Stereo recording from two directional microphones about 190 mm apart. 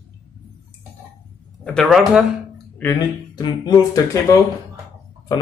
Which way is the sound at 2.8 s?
20° left (ahead or behind).